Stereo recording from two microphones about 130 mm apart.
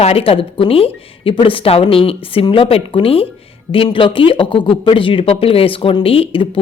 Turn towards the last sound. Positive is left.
turn(degrees=45)  # may be behind; listen again after turning